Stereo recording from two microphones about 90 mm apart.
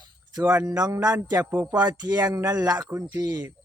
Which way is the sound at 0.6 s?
40° right (ahead or behind).